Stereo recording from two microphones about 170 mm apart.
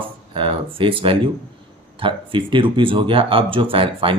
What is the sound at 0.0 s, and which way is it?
Speech, 30° right (ahead or behind).